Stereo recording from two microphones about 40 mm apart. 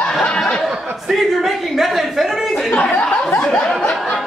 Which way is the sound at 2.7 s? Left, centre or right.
Left.